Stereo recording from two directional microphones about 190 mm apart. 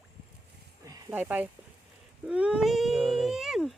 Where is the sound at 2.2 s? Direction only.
5° right (ahead or behind).